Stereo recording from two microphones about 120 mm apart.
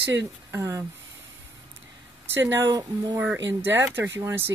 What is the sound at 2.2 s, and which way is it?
Speech, 20° right (ahead or behind).